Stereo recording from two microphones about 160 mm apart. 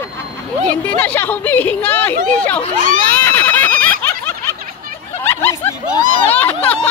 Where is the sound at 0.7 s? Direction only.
10° left (ahead or behind).